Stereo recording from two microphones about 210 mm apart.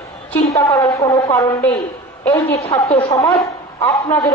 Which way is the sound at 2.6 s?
30° left (ahead or behind).